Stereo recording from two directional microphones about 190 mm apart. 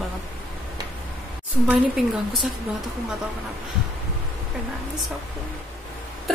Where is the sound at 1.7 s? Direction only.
Centre (ahead or behind).